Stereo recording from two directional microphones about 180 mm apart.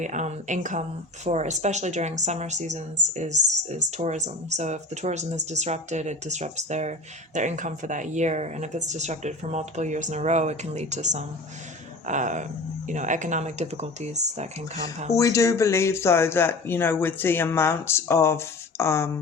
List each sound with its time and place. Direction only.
0.0 s speech: 40° right (ahead or behind)
15.1 s speech: 15° left (ahead or behind)